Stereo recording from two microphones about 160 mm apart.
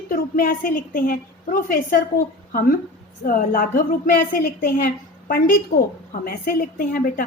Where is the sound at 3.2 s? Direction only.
60° left (ahead or behind).